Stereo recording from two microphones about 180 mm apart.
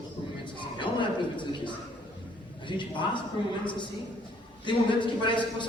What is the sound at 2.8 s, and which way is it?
Speech, 25° left (ahead or behind).